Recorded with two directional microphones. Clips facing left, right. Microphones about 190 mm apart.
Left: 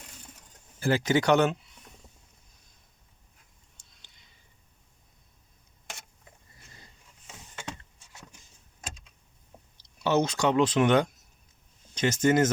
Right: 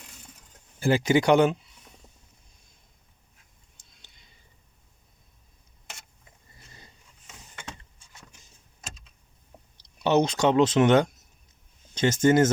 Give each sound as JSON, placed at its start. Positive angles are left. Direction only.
{"t": 0.8, "sound": "speech", "side_deg": -15}
{"t": 10.0, "sound": "speech", "side_deg": -20}